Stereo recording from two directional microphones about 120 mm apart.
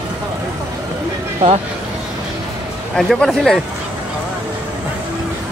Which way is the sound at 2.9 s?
5° left (ahead or behind).